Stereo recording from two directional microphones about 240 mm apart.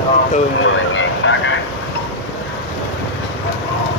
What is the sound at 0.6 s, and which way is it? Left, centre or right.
Vehicle, left.